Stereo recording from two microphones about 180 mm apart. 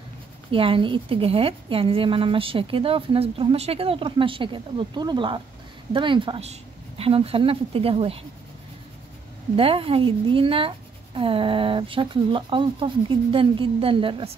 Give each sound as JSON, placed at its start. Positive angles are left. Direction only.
{"t": 0.5, "sound": "a woman's voice", "side_deg": -30}
{"t": 9.6, "sound": "a woman's voice", "side_deg": -30}